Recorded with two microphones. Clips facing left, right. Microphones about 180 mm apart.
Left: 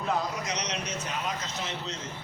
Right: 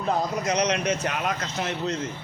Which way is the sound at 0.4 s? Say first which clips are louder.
Right 10 dB; 55° right (ahead or behind).